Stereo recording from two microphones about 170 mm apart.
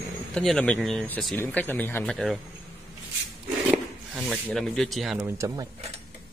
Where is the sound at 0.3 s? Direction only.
5° left (ahead or behind).